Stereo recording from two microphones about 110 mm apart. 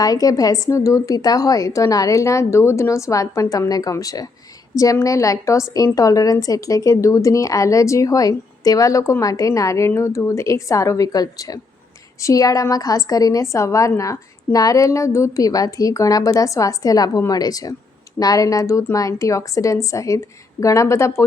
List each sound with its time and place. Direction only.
0.0 s a woman's voice: 35° left (ahead or behind)